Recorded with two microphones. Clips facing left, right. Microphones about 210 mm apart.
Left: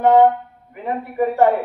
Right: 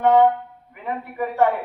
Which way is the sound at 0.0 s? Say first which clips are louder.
Left 3 dB; 40° left (ahead or behind).